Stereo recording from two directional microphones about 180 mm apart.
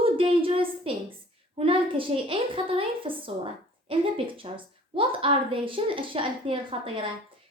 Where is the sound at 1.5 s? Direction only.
30° right (ahead or behind).